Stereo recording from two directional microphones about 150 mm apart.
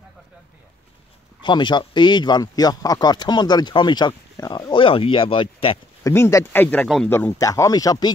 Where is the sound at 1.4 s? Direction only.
30° left (ahead or behind).